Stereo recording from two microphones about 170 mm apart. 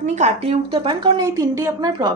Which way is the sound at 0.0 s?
40° right (ahead or behind).